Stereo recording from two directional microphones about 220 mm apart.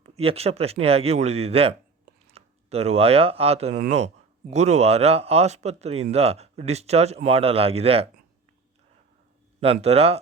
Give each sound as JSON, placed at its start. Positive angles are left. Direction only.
{"t": 0.0, "sound": "speech", "side_deg": -25}
{"t": 9.6, "sound": "speech", "side_deg": -25}